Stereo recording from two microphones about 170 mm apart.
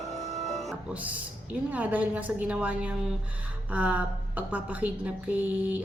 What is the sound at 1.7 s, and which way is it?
Speech, 10° right (ahead or behind).